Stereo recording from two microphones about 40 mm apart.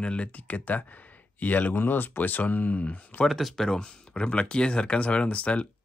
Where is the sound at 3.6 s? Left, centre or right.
Centre.